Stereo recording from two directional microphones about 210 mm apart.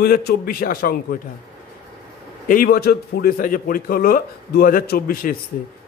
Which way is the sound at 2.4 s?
45° left (ahead or behind).